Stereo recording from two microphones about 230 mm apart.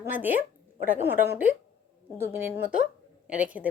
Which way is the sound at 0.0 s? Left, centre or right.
Centre.